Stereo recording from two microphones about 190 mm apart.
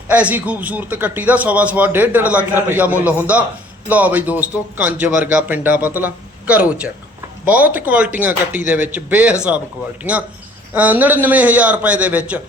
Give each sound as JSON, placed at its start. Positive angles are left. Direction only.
{"t": 0.1, "sound": "a man's voice", "side_deg": -10}